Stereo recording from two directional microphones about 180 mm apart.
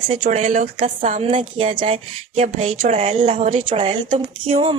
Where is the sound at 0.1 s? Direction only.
45° right (ahead or behind).